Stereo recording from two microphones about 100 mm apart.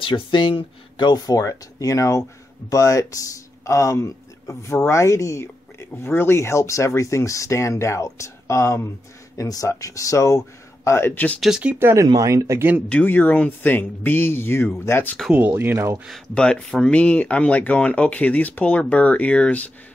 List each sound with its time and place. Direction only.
0.0 s speech: 55° left (ahead or behind); by 11.3 s 20° left (ahead or behind)
11.3 s speech: centre (ahead or behind)
11.8 s speech: 25° right (ahead or behind)
12.8 s speech: 15° left (ahead or behind)
15.3 s speech: 20° right (ahead or behind)
16.3 s speech: 10° left (ahead or behind)